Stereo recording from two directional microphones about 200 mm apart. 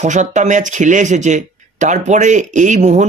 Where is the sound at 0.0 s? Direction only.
40° right (ahead or behind).